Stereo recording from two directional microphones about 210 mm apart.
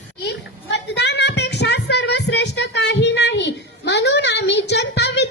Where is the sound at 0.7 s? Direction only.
55° left (ahead or behind).